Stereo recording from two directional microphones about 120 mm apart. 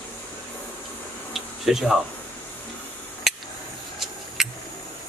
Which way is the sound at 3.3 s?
Centre (ahead or behind).